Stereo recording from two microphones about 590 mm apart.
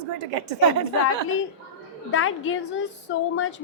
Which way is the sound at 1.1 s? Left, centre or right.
Centre.